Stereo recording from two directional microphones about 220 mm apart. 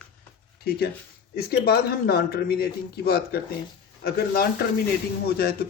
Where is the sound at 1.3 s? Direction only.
45° left (ahead or behind).